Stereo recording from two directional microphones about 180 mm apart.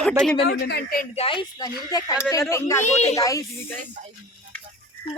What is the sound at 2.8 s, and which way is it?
Speech, 35° left (ahead or behind).